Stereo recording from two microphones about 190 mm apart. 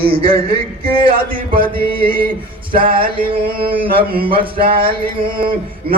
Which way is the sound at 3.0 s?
30° right (ahead or behind).